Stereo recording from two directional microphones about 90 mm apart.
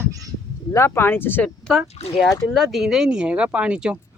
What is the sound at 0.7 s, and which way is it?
Speech, 30° left (ahead or behind).